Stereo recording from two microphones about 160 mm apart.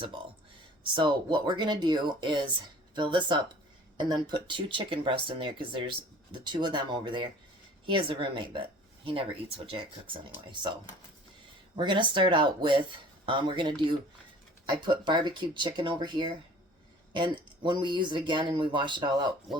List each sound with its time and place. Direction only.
0.9 s speech: 30° right (ahead or behind)
11.8 s speech: 30° right (ahead or behind)